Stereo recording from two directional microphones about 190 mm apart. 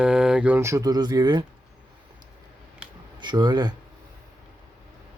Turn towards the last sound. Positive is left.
turn(degrees=-25)  # may be behind; listen again after turning